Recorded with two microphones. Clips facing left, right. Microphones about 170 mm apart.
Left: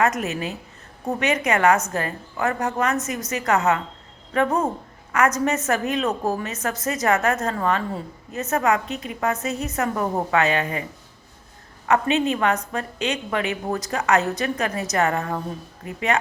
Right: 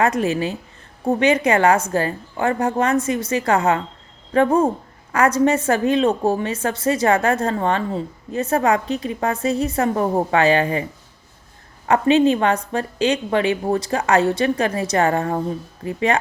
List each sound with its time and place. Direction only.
0.0 s a woman's voice: 30° right (ahead or behind)
11.9 s a woman's voice: 30° right (ahead or behind)